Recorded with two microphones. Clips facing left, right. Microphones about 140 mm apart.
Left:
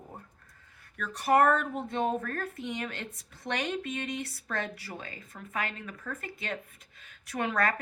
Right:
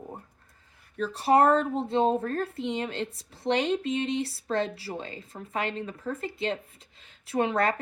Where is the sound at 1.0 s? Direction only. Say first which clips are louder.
Right 3 dB; 30° right (ahead or behind).